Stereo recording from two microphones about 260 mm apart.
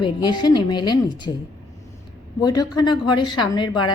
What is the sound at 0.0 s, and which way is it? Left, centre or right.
A woman's voice, centre.